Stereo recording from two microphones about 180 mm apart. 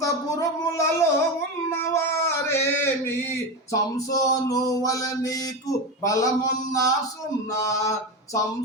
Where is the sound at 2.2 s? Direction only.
15° left (ahead or behind).